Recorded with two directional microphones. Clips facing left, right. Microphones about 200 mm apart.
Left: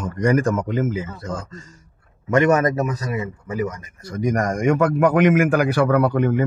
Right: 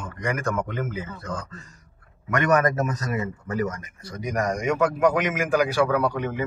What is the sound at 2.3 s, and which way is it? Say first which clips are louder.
Speech: left 5 dB; 25° left (ahead or behind).